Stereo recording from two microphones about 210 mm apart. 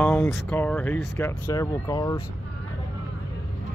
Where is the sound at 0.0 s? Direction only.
5° left (ahead or behind).